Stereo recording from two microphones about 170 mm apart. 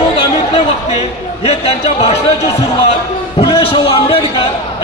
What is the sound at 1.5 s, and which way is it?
Speech, 35° left (ahead or behind).